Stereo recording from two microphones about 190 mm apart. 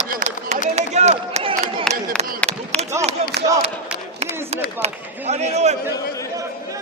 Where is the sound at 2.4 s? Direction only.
5° left (ahead or behind).